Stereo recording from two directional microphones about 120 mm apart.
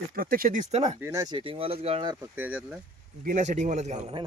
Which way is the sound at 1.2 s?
45° right (ahead or behind).